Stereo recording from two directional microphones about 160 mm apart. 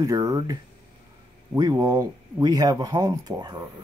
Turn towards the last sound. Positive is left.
turn(degrees=-25)  # may be behind; listen again after turning